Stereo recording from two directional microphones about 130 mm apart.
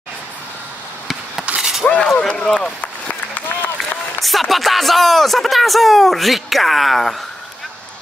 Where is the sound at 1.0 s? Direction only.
5° right (ahead or behind).